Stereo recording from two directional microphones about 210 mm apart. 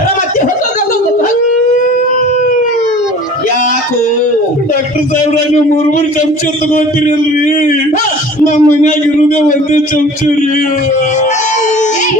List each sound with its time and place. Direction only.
8.5 s a man's voice: 35° left (ahead or behind)